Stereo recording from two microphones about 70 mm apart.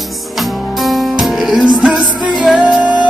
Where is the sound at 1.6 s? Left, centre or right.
Centre.